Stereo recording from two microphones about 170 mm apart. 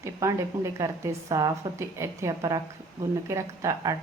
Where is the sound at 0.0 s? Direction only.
15° right (ahead or behind).